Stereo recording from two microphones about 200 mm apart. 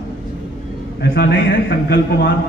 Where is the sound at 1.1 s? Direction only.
50° left (ahead or behind).